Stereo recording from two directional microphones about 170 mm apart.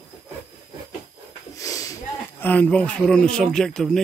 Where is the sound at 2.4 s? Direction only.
10° left (ahead or behind).